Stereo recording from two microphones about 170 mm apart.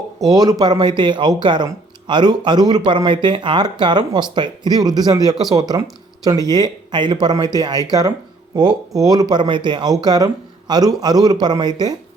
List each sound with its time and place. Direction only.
0.3 s speech: 20° right (ahead or behind)